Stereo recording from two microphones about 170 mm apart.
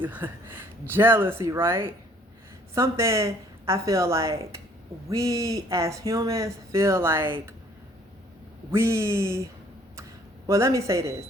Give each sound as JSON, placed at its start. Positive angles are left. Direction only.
{"t": 0.0, "sound": "speech", "side_deg": -10}
{"t": 8.7, "sound": "speech", "side_deg": -15}
{"t": 10.0, "sound": "a sound", "side_deg": -20}